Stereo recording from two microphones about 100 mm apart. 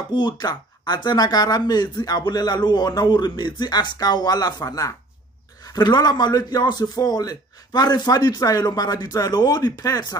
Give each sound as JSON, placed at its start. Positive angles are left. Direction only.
{"t": 0.1, "sound": "speech", "side_deg": 45}